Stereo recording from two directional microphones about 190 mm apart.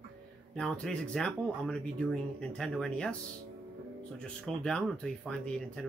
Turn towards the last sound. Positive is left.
turn(degrees=5)  # may be behind; listen again after turning